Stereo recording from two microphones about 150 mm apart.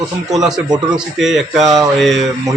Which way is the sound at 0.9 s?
Centre (ahead or behind).